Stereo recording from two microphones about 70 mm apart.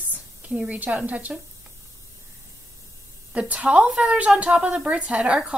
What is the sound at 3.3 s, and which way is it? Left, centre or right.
A woman's voice, centre.